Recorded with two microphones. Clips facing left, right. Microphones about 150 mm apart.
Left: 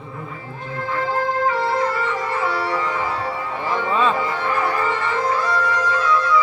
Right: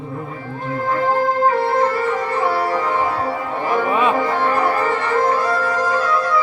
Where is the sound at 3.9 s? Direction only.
15° right (ahead or behind).